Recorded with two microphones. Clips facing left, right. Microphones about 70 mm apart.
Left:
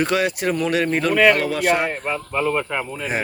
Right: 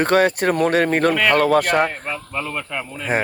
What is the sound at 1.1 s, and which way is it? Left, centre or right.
Speech, centre.